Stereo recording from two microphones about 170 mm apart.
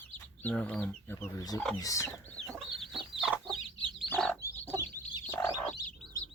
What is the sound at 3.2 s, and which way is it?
Chicken, 5° right (ahead or behind).